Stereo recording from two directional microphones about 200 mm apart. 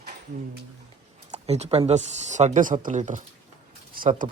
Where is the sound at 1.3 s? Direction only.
35° right (ahead or behind).